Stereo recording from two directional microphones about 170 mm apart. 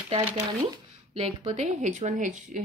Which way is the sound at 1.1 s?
40° right (ahead or behind).